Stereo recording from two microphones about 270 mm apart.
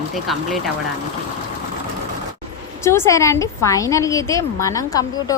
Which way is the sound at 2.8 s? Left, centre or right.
Centre.